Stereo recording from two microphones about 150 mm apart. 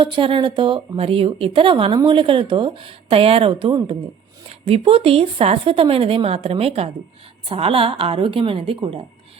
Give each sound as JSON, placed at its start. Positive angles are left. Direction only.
{"t": 0.0, "sound": "a woman's voice", "side_deg": -35}